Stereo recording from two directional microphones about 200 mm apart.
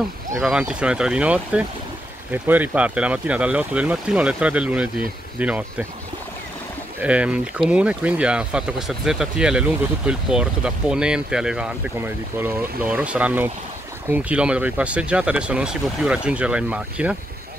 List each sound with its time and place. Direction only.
0.4 s speech: 5° right (ahead or behind)
7.0 s speech: 5° right (ahead or behind)